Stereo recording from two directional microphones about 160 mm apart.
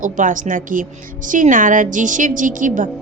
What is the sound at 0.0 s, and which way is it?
A woman's voice, 55° right (ahead or behind).